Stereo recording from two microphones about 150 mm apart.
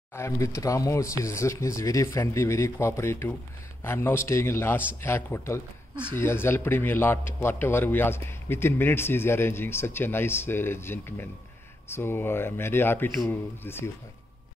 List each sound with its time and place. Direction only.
0.1 s a man's voice: 20° left (ahead or behind)